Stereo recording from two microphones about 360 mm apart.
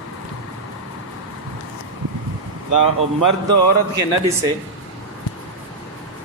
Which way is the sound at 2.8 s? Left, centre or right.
Right.